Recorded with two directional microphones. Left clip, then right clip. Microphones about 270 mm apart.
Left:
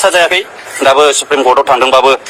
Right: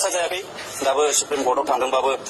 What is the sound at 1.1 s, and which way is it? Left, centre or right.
Speech, left.